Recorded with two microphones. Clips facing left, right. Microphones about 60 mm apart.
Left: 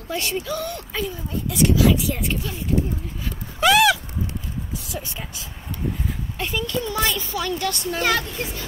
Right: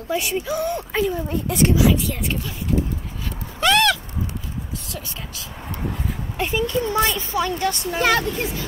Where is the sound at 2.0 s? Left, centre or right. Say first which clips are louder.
Even; centre.